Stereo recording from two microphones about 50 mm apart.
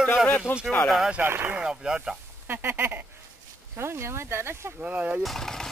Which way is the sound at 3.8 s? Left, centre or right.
Right.